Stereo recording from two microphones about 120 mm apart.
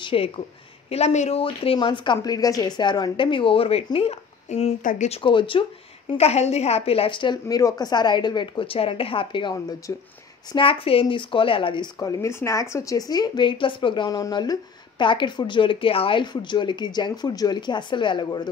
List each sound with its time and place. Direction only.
0.0 s speech: 50° left (ahead or behind)
0.8 s speech: 60° left (ahead or behind)
1.4 s a woman's voice: 50° left (ahead or behind)
2.2 s a woman's voice: 30° left (ahead or behind); by 5.2 s 80° left
5.2 s a woman's voice: 45° left (ahead or behind)
7.4 s a woman's voice: 30° left (ahead or behind)
10.5 s a woman's voice: 45° left (ahead or behind)